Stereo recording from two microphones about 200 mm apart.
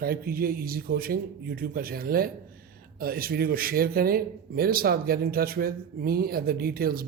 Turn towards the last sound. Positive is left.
turn(degrees=-50)  # may be behind; listen again after turning